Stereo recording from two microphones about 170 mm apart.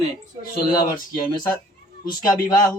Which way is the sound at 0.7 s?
25° left (ahead or behind).